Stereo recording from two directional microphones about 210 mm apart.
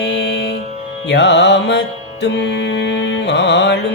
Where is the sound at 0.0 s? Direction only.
55° left (ahead or behind).